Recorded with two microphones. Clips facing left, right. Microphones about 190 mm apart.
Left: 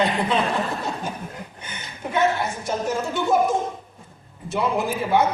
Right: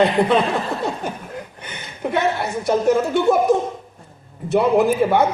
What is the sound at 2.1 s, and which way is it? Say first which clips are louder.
Speech: right 1 dB; 65° right (ahead or behind).